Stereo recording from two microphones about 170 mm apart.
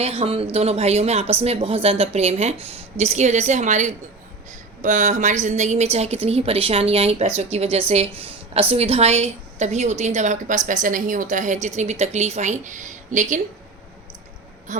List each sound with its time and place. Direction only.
0.0 s a woman's voice: 35° right (ahead or behind)